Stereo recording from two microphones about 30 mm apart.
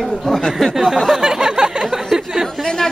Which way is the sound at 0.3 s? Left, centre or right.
Left.